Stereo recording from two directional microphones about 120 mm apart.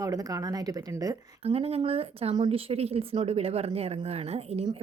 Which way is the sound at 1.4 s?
60° right (ahead or behind).